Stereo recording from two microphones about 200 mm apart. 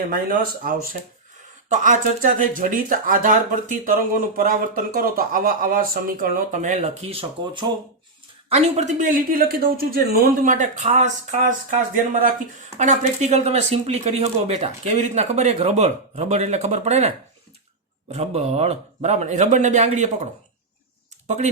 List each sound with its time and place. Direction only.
0.1 s speech: 45° right (ahead or behind)
21.2 s speech: 35° right (ahead or behind)